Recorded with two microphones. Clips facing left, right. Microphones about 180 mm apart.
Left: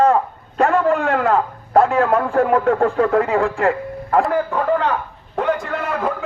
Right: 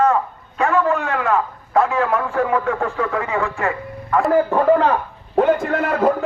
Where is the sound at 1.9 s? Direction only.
45° left (ahead or behind).